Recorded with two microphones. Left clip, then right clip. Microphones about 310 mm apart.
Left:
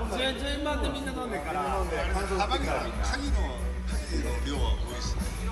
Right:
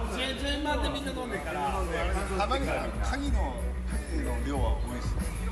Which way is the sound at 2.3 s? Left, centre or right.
Right.